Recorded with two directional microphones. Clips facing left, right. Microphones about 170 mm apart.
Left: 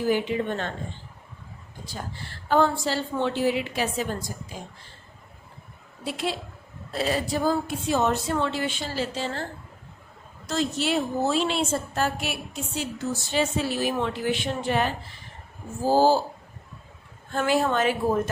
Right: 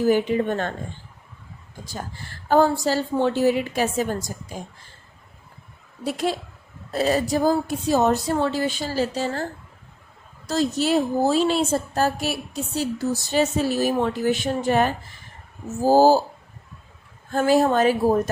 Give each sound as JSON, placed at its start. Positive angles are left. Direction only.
{"t": 0.1, "sound": "a woman's voice", "side_deg": -45}
{"t": 1.8, "sound": "a woman's voice", "side_deg": -45}
{"t": 6.0, "sound": "a woman's voice", "side_deg": -45}
{"t": 10.5, "sound": "a woman's voice", "side_deg": -40}
{"t": 17.3, "sound": "a woman's voice", "side_deg": -40}